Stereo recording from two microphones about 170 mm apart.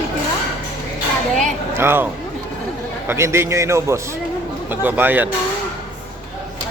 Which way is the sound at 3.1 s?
15° right (ahead or behind).